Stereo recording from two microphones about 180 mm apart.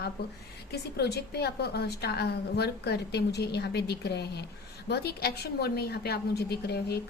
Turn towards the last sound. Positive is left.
turn(degrees=65)  # may be behind; listen again after turning